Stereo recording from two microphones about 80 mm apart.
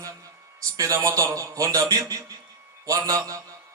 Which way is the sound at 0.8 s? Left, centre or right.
Right.